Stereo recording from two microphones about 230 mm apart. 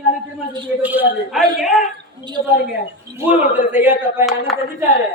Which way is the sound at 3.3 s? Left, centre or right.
Left.